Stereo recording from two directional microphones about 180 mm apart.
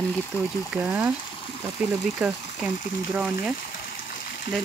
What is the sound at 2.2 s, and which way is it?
Speech, centre (ahead or behind).